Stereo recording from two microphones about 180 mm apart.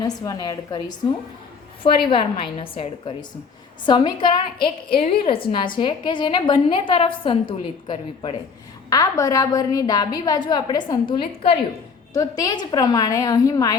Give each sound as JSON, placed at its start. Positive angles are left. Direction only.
{"t": 0.0, "sound": "a woman's voice", "side_deg": 20}
{"t": 2.0, "sound": "a woman's voice", "side_deg": 30}